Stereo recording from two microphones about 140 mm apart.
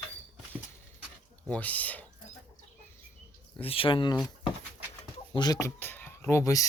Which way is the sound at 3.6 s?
40° left (ahead or behind).